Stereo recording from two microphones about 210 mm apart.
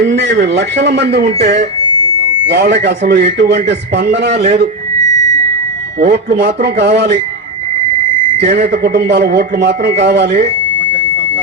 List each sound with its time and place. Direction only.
0.0 s a man's voice: 55° right (ahead or behind)
6.0 s a man's voice: 50° right (ahead or behind)
8.6 s a man's voice: 50° right (ahead or behind)